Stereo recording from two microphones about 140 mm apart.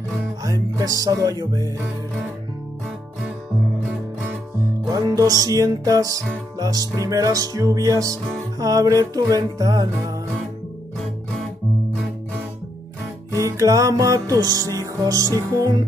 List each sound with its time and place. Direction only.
0.4 s music: 25° right (ahead or behind)
4.6 s music: 25° right (ahead or behind)
13.3 s music: 25° right (ahead or behind)